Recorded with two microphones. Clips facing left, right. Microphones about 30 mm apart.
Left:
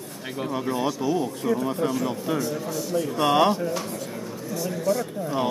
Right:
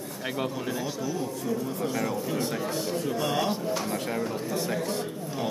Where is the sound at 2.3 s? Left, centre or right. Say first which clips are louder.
Left 2 dB; right.